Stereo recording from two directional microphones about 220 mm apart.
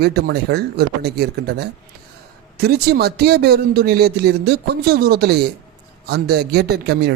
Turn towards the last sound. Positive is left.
turn(degrees=-45)  # may be behind; listen again after turning